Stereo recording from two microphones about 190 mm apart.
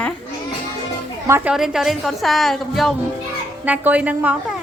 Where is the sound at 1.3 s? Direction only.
15° right (ahead or behind).